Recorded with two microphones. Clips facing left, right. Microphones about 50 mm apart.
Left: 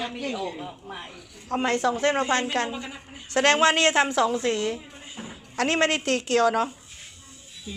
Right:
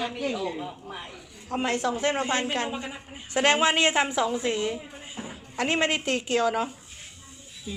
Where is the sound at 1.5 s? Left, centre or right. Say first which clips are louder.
Left 2 dB; left.